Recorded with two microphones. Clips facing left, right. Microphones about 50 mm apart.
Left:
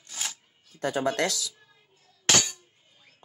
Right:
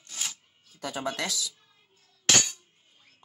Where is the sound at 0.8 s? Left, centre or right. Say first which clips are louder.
Left 6 dB; left.